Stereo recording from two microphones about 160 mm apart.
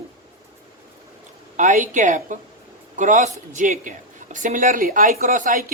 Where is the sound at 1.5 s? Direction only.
50° right (ahead or behind).